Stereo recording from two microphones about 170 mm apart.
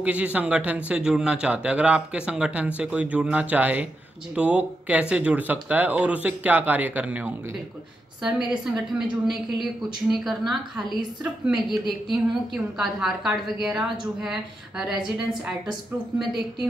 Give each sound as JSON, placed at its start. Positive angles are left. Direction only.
{"t": 0.0, "sound": "a woman's voice", "side_deg": -10}